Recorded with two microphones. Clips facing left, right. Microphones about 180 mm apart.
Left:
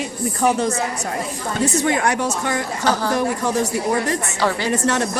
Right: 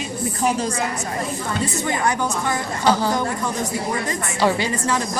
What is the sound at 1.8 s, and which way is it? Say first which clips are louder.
Speech: left 3 dB; 75° left (ahead or behind).